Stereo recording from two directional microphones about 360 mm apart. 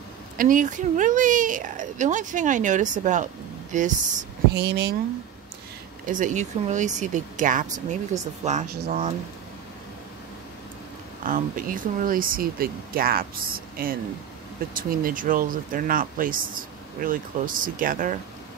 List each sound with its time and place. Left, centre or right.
0.4 s speech: right
6.0 s speech: right
11.2 s speech: right